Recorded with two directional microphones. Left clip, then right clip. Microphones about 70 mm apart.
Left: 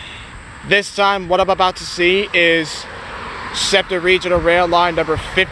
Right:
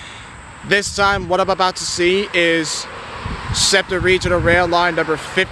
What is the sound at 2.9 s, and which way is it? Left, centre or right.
Vehicle, centre.